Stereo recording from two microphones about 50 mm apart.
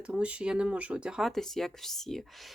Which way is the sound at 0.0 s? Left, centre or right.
Right.